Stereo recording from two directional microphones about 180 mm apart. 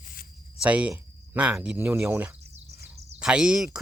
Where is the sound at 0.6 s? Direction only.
5° right (ahead or behind).